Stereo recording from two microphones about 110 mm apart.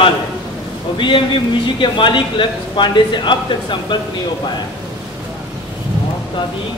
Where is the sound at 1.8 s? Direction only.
45° left (ahead or behind).